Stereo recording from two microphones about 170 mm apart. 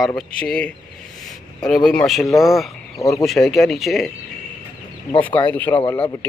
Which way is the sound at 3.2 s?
Centre (ahead or behind).